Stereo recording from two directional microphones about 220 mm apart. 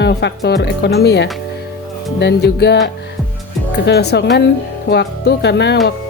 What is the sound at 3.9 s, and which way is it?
Speech, 50° left (ahead or behind).